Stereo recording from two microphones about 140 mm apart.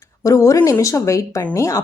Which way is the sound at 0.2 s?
20° left (ahead or behind).